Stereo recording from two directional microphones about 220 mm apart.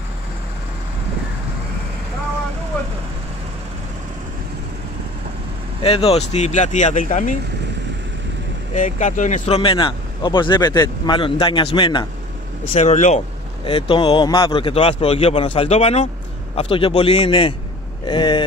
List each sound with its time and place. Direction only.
5.8 s speech: 25° left (ahead or behind)
8.7 s speech: 35° left (ahead or behind)
12.7 s speech: 30° left (ahead or behind)